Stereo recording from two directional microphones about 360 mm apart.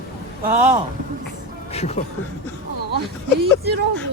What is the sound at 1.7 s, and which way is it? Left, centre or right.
Speech, centre.